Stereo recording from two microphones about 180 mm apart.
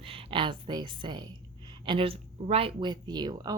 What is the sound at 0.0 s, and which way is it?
Speech, 30° right (ahead or behind).